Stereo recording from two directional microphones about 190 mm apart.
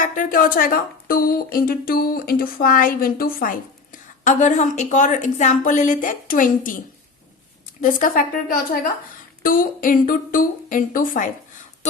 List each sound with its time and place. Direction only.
0.0 s a woman's voice: 45° left (ahead or behind)
7.8 s speech: 45° left (ahead or behind)